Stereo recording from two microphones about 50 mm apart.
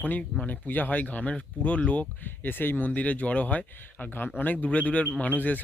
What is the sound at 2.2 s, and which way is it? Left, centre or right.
Speech, left.